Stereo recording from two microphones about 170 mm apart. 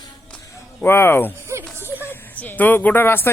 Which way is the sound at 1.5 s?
15° right (ahead or behind).